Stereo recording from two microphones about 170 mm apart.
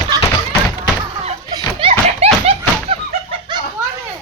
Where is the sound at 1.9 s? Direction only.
40° right (ahead or behind).